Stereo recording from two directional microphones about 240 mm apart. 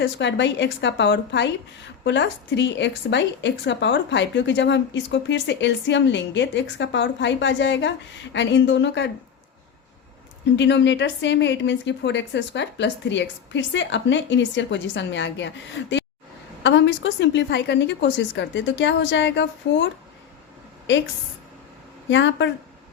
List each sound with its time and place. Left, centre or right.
0.0 s a woman's voice: left
10.6 s a woman's voice: left
22.1 s a woman's voice: left